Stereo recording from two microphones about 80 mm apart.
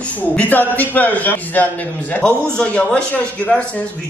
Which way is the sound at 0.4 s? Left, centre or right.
Left.